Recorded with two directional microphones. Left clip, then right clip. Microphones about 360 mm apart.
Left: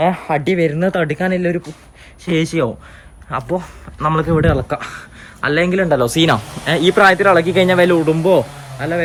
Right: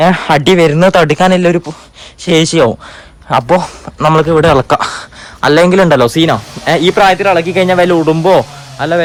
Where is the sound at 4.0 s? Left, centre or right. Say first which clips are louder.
Right 8 dB; centre.